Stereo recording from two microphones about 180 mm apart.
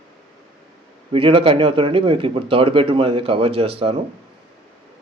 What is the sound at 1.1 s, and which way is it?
Speech, 30° right (ahead or behind).